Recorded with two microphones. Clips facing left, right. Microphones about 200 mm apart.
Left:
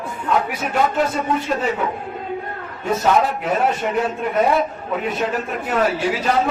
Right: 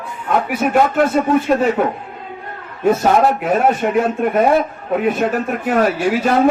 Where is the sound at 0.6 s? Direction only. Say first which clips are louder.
Right 5 dB; 55° right (ahead or behind).